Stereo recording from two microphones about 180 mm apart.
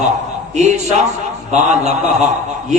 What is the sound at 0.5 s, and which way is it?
A man's voice, 40° right (ahead or behind).